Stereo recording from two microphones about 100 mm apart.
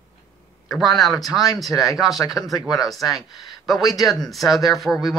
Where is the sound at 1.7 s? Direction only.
35° left (ahead or behind).